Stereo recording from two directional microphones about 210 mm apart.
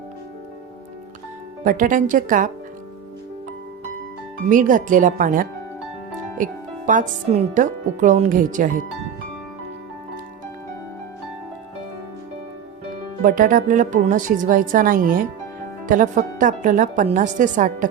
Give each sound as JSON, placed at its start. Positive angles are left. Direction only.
{"t": 1.6, "sound": "speech", "side_deg": -40}
{"t": 4.4, "sound": "speech", "side_deg": -40}
{"t": 6.3, "sound": "music", "side_deg": -40}
{"t": 7.3, "sound": "speech", "side_deg": -35}
{"t": 13.2, "sound": "speech", "side_deg": -40}